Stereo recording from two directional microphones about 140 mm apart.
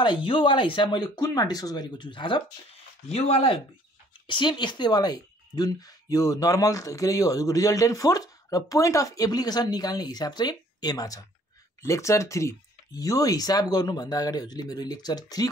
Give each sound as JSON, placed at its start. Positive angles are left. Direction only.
{"t": 0.0, "sound": "speech", "side_deg": 35}